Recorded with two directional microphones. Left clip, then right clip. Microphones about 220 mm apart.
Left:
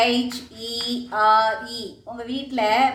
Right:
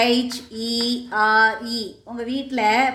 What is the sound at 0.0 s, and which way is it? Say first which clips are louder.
A woman's voice: right 1 dB; 45° right (ahead or behind).